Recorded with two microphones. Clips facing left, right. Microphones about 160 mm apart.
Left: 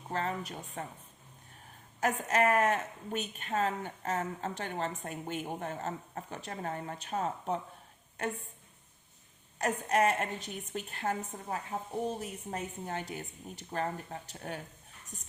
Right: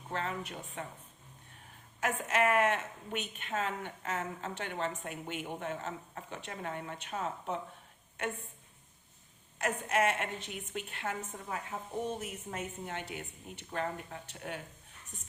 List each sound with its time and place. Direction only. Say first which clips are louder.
0.1 s a woman's voice: left 2 dB; 40° left (ahead or behind)
2.0 s a woman's voice: left 2 dB; 40° left (ahead or behind)
9.6 s a woman's voice: left 2 dB; 40° left (ahead or behind)